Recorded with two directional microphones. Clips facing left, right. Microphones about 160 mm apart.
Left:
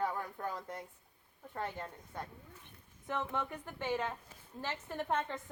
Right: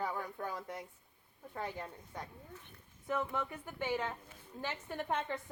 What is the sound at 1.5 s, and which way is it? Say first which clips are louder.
Speech: left 1 dB; 10° right (ahead or behind).